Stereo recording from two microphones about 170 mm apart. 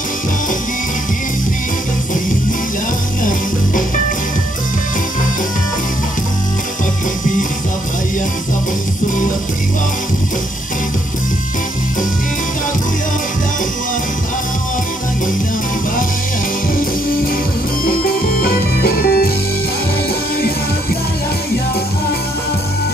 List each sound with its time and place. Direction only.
17.8 s music: 60° left (ahead or behind)